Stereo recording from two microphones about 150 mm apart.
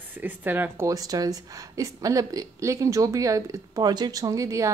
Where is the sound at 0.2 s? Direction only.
10° right (ahead or behind).